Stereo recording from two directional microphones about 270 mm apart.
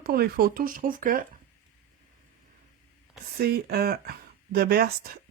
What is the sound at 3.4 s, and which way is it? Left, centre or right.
Speech, right.